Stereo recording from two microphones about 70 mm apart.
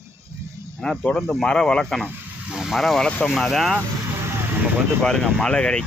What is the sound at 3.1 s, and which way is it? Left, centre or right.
Speech, left.